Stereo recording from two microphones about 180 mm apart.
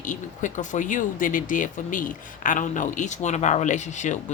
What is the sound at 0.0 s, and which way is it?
Speech, 45° left (ahead or behind).